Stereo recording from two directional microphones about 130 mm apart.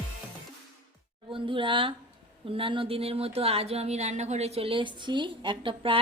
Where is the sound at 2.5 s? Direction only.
45° right (ahead or behind).